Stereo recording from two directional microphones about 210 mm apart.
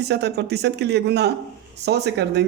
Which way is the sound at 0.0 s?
55° right (ahead or behind).